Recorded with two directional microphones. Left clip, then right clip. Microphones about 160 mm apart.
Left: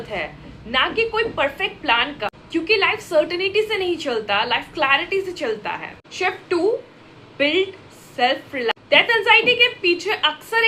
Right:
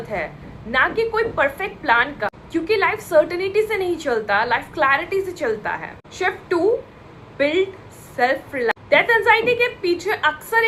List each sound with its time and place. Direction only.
0.7 s a woman's voice: 20° left (ahead or behind)